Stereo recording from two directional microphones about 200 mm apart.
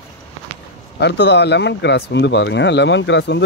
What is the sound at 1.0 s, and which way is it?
Speech, 60° left (ahead or behind).